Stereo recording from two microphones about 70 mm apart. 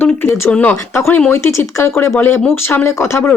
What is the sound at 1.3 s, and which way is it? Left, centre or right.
Speech, left.